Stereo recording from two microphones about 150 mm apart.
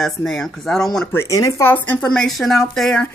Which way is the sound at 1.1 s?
20° left (ahead or behind).